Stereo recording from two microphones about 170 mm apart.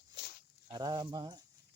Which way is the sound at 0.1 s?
75° left (ahead or behind).